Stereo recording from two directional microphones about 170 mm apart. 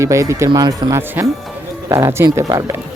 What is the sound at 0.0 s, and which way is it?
Speech, 20° right (ahead or behind).